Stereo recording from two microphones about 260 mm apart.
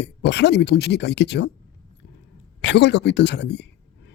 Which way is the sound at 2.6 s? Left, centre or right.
Left.